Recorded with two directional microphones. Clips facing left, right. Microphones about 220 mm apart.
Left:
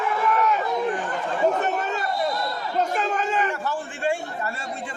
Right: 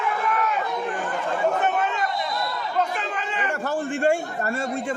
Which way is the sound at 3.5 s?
45° right (ahead or behind).